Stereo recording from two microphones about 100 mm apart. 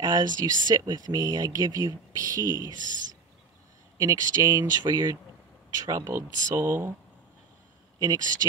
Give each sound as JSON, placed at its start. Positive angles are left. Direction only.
{"t": 0.0, "sound": "speech", "side_deg": -40}
{"t": 4.0, "sound": "speech", "side_deg": -35}
{"t": 4.8, "sound": "speech", "side_deg": -45}
{"t": 5.9, "sound": "speech", "side_deg": -30}
{"t": 8.0, "sound": "speech", "side_deg": -35}